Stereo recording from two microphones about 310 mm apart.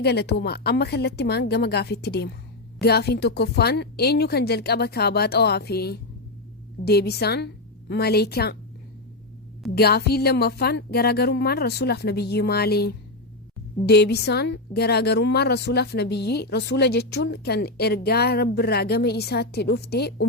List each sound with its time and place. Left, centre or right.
0.0 s a woman's voice: left
9.7 s a woman's voice: left